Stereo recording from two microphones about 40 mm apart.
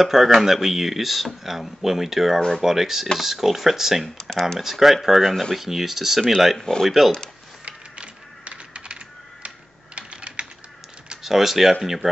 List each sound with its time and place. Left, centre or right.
0.0 s speech: centre
4.2 s speech: centre
4.6 s speech: centre
5.2 s speech: centre
5.6 s speech: centre
6.6 s speech: centre
7.6 s computer keyboard: right
9.9 s typing: right
11.2 s speech: centre